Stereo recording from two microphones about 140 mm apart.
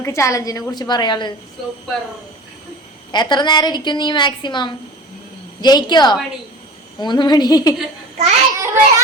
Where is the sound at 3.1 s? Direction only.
30° left (ahead or behind).